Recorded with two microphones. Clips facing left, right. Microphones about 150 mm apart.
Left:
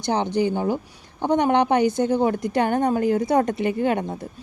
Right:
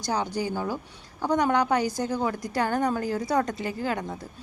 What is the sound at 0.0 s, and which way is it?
Speech, 25° left (ahead or behind).